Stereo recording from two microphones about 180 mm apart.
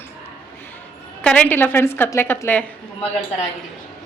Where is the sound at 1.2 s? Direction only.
10° left (ahead or behind).